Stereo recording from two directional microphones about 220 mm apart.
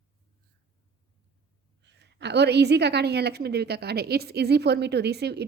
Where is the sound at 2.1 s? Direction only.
50° right (ahead or behind).